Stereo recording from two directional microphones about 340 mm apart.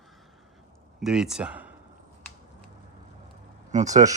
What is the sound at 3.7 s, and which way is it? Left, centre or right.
Speech, right.